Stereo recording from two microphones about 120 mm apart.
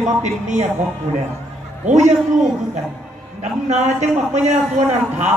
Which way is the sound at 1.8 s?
75° right (ahead or behind).